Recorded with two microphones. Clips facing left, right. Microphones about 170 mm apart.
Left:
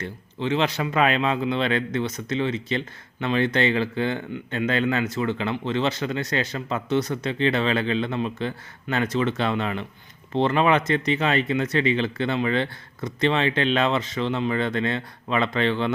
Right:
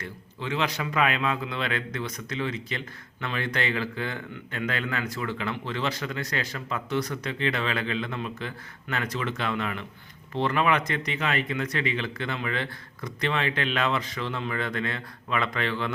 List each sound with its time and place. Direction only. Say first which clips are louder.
0.0 s a man's voice: left 7 dB; 25° left (ahead or behind)